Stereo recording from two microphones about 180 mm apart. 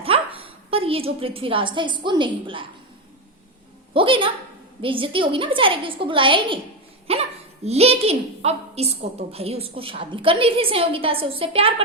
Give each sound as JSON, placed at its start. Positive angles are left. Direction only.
{"t": 0.0, "sound": "a woman's voice", "side_deg": -30}
{"t": 3.9, "sound": "a woman's voice", "side_deg": -30}